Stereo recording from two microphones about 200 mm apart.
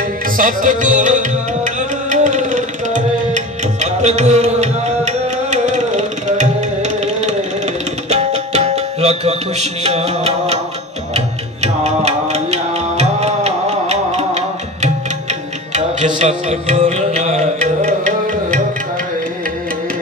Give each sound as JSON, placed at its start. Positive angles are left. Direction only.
{"t": 0.4, "sound": "music", "side_deg": -40}
{"t": 16.2, "sound": "music", "side_deg": -35}